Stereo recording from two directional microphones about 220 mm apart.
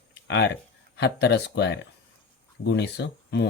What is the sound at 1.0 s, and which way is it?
Speech, 50° left (ahead or behind).